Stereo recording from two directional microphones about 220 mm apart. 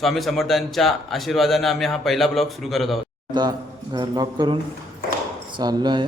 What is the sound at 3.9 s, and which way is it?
Speech, 20° right (ahead or behind).